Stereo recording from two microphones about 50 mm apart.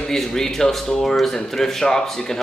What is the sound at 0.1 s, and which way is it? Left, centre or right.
Speech, centre.